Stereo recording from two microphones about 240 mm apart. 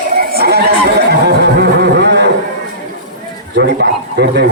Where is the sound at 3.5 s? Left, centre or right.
Right.